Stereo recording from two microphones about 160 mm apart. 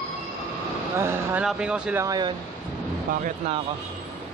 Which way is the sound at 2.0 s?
25° right (ahead or behind).